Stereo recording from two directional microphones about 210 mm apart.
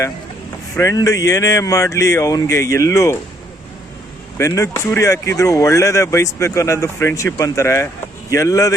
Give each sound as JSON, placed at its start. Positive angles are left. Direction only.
{"t": 0.8, "sound": "speech", "side_deg": 15}
{"t": 4.4, "sound": "speech", "side_deg": 15}